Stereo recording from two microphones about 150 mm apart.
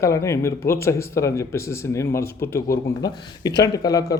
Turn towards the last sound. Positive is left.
turn(degrees=25)  # may be behind; listen again after turning